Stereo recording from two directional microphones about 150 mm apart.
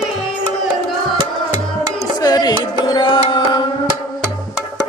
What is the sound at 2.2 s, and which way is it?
Music, 25° left (ahead or behind).